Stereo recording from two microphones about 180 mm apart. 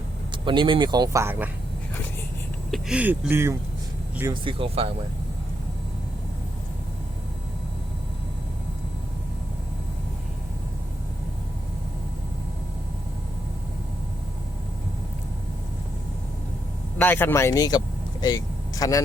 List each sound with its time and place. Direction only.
0.4 s speech: 25° right (ahead or behind)
2.6 s speech: centre (ahead or behind)
4.4 s speech: 30° right (ahead or behind)
17.0 s speech: 10° left (ahead or behind)